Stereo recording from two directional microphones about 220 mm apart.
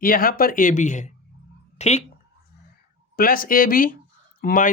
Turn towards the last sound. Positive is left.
turn(degrees=40)  # may be behind; listen again after turning